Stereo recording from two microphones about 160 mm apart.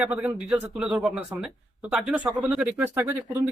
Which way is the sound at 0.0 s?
10° right (ahead or behind).